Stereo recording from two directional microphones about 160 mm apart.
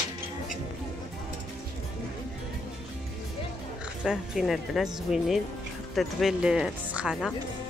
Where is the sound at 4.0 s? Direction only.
5° right (ahead or behind).